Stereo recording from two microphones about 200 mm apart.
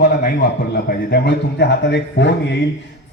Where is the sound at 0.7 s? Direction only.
50° left (ahead or behind).